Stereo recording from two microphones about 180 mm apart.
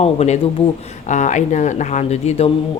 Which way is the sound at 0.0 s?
35° left (ahead or behind).